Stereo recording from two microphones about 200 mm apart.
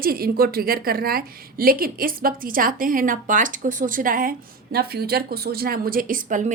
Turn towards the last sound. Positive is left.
turn(degrees=-40)  # may be behind; listen again after turning